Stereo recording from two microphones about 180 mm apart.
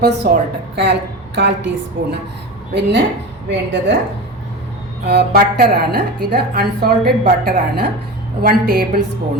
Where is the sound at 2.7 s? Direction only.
70° right (ahead or behind).